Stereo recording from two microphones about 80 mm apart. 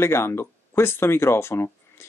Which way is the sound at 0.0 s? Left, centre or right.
Left.